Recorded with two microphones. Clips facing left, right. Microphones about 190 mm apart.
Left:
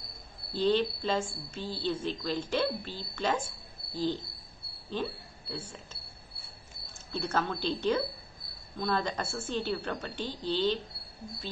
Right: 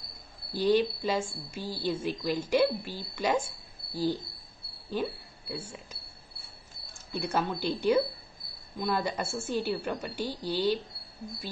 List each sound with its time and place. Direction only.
0.5 s a woman's voice: 10° right (ahead or behind)
3.9 s cricket: 10° right (ahead or behind)
4.8 s speech: 10° right (ahead or behind)
7.1 s a woman's voice: 10° right (ahead or behind)